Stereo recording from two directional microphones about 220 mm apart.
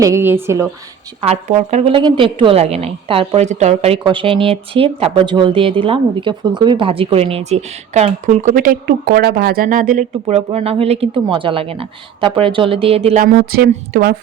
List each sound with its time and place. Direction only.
0.0 s a woman's voice: 10° right (ahead or behind)
1.2 s a woman's voice: 30° right (ahead or behind)
13.2 s speech: 45° right (ahead or behind)